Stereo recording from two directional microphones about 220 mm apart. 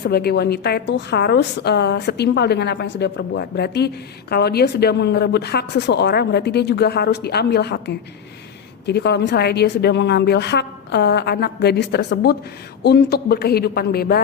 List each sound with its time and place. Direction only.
0.0 s a woman's voice: 45° left (ahead or behind)